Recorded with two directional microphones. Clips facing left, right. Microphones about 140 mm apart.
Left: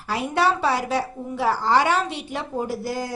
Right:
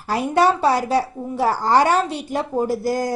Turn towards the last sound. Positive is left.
turn(degrees=-40)  # may be behind; listen again after turning